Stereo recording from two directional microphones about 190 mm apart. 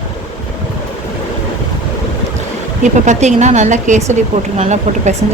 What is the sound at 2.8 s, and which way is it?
Speech, 40° right (ahead or behind).